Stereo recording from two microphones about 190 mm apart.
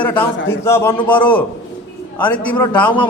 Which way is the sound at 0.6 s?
15° left (ahead or behind).